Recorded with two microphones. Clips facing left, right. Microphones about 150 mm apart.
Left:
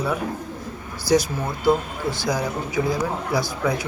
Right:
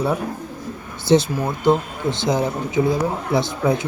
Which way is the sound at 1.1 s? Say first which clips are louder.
Right 4 dB; 25° right (ahead or behind).